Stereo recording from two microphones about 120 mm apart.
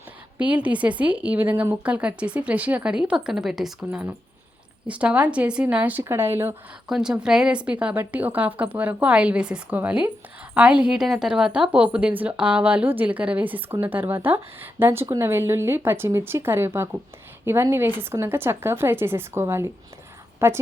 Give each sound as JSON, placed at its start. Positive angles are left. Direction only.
{"t": 0.3, "sound": "a woman's voice", "side_deg": -10}
{"t": 6.8, "sound": "a woman's voice", "side_deg": -5}